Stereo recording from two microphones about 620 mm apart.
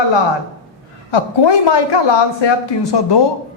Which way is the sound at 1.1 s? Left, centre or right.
Left.